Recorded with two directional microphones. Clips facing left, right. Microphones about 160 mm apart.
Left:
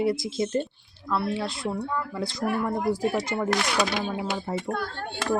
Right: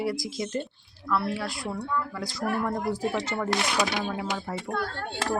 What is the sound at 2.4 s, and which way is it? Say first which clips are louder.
Speech: left 2 dB; 5° left (ahead or behind).